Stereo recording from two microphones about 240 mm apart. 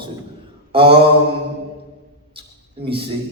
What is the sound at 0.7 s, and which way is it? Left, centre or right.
Mantra, right.